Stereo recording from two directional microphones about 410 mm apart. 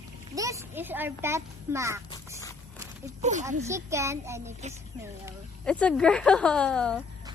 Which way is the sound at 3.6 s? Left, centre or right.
Centre.